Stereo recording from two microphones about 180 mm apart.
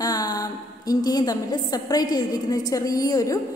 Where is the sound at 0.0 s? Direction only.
20° left (ahead or behind).